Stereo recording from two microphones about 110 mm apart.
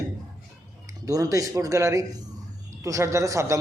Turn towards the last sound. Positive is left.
turn(degrees=-30)  # may be behind; listen again after turning